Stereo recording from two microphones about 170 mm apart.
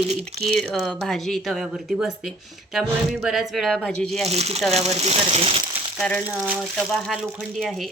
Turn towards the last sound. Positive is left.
turn(degrees=0)  # may be behind; listen again after turning